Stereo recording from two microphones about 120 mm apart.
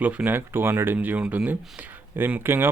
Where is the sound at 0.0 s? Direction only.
10° right (ahead or behind).